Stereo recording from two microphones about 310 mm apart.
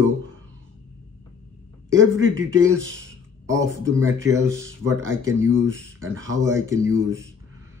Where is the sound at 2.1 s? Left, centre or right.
Right.